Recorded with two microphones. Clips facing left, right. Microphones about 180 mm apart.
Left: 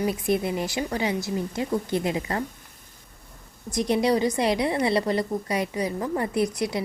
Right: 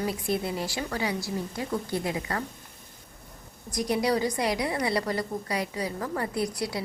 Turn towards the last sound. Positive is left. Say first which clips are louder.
# left 5 dB
turn(degrees=20)  # may be behind; listen again after turning